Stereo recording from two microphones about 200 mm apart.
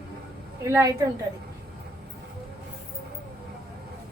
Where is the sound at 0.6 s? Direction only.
15° right (ahead or behind).